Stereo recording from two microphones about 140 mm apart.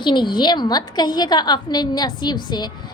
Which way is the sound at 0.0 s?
35° left (ahead or behind).